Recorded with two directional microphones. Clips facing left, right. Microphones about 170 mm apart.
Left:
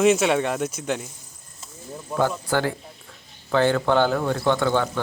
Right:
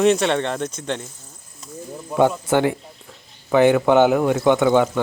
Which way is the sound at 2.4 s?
20° right (ahead or behind).